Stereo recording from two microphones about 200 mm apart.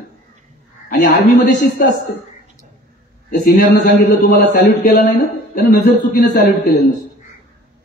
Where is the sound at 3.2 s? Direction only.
50° left (ahead or behind).